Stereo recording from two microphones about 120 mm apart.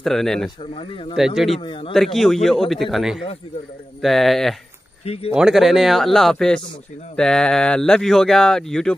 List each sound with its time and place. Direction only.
0.0 s speech: 5° left (ahead or behind)
0.6 s speech: 50° left (ahead or behind)
1.1 s speech: 5° right (ahead or behind)
1.6 s speech: 45° left (ahead or behind)
2.0 s speech: centre (ahead or behind)
5.0 s speech: 55° left (ahead or behind)
5.3 s speech: 5° right (ahead or behind)